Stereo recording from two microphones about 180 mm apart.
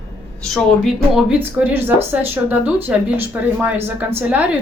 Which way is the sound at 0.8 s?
5° right (ahead or behind).